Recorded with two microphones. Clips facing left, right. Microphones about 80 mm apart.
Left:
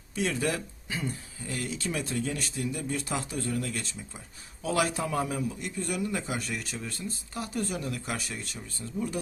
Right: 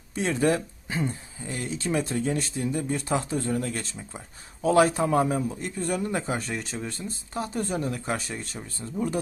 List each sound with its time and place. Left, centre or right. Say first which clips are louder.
0.1 s a man's voice: right 5 dB; right